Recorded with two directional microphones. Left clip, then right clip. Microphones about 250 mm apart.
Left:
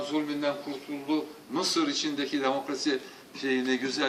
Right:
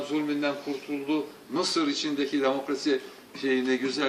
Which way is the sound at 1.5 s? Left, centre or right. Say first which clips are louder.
Right 1 dB; centre.